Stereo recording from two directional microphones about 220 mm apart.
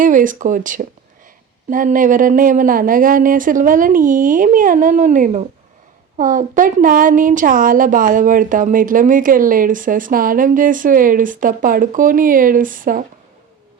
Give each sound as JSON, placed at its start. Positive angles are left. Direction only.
{"t": 0.0, "sound": "a woman's voice", "side_deg": -35}